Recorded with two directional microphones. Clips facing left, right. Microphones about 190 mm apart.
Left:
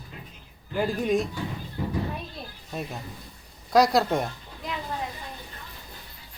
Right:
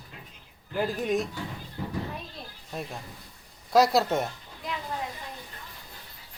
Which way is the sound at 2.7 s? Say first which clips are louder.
Left 2 dB; centre (ahead or behind).